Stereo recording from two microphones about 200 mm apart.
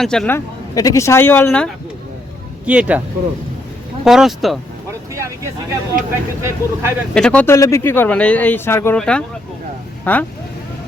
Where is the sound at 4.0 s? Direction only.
Centre (ahead or behind).